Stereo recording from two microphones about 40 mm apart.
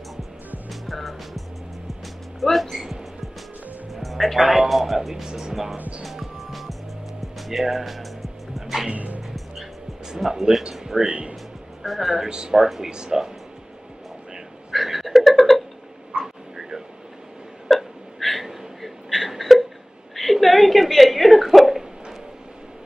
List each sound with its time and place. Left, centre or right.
0.7 s music: centre
2.4 s a sound: centre
3.9 s speech: centre
5.8 s speech: right
6.0 s music: centre
8.9 s music: right
10.2 s speech: centre
10.6 s speech: centre
11.1 s music: right
11.8 s speech: centre
12.3 s speech: centre
14.7 s a sound: centre
17.6 s hiccup: centre
20.2 s a sound: centre